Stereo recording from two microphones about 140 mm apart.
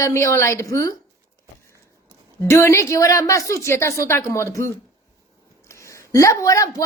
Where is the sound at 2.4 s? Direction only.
20° left (ahead or behind).